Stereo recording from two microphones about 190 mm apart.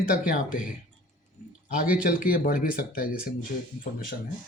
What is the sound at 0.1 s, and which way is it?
Speech, 45° left (ahead or behind).